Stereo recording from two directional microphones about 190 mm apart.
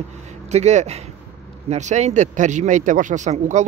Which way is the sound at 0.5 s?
35° right (ahead or behind).